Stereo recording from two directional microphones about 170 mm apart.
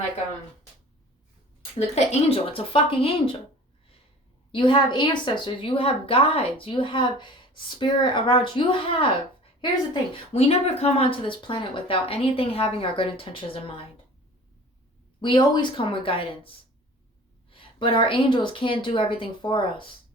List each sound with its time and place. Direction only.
2.3 s speech: 30° left (ahead or behind)
4.5 s speech: 30° left (ahead or behind)
15.2 s a woman's voice: 25° left (ahead or behind)